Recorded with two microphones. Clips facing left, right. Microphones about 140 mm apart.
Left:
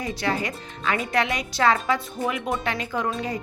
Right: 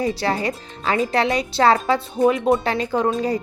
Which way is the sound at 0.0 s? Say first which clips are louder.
Right 5 dB; 30° right (ahead or behind).